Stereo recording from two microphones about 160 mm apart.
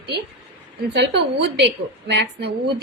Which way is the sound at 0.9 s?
90° right.